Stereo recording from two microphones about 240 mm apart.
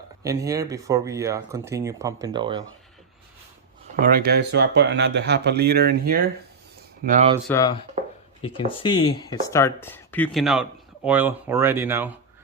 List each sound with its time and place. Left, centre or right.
0.2 s speech: centre
3.9 s speech: right
7.4 s speech: centre
8.0 s a sound: right
8.6 s speech: left; by 12.1 s centre